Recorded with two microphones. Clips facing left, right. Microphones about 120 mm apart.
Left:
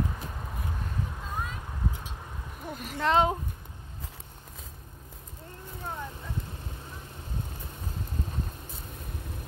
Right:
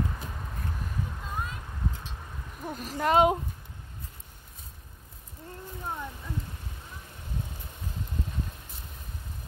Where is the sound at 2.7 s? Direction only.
40° right (ahead or behind).